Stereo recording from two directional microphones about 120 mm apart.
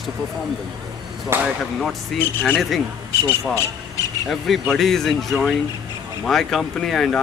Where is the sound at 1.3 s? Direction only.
20° right (ahead or behind).